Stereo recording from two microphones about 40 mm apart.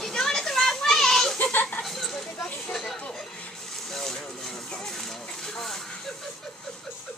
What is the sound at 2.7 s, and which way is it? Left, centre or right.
Chatter, centre.